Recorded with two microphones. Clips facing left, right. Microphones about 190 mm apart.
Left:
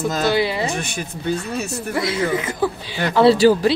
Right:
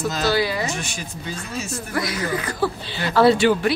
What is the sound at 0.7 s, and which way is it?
Speech, 55° left (ahead or behind).